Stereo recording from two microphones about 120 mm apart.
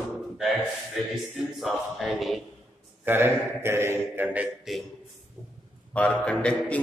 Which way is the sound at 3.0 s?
20° right (ahead or behind).